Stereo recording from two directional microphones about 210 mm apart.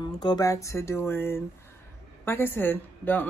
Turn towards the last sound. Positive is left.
turn(degrees=10)  # may be behind; listen again after turning